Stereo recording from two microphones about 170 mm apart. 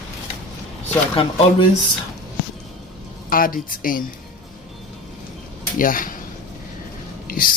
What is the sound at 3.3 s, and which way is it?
Speech, 55° left (ahead or behind).